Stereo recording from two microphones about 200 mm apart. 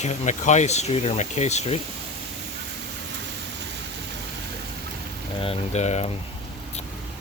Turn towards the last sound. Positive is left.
turn(degrees=35)  # may be behind; listen again after turning